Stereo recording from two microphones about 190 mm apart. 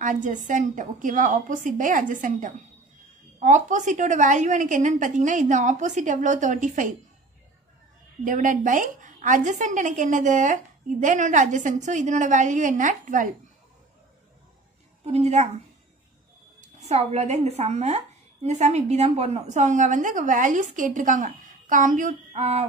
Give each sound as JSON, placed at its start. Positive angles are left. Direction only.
{"t": 0.0, "sound": "a woman's voice", "side_deg": -40}
{"t": 8.2, "sound": "a woman's voice", "side_deg": -45}
{"t": 15.0, "sound": "a woman's voice", "side_deg": -35}
{"t": 16.6, "sound": "a woman's voice", "side_deg": -35}